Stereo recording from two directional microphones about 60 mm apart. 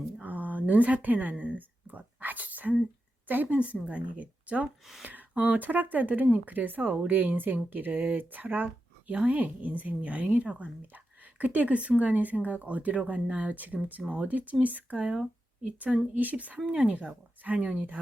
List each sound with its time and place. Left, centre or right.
0.2 s a woman's voice: right